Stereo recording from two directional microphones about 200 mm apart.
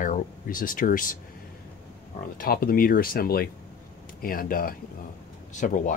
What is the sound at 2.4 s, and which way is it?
Speech, 45° left (ahead or behind).